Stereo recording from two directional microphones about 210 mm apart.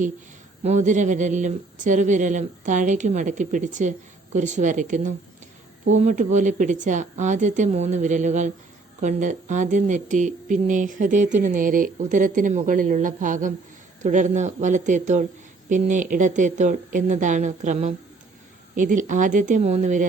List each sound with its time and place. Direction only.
0.6 s speech: 35° right (ahead or behind)